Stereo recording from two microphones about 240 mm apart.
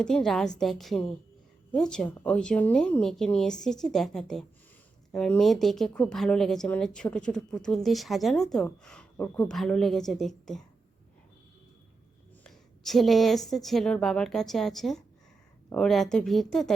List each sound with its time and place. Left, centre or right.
0.0 s speech: centre
12.4 s speech: centre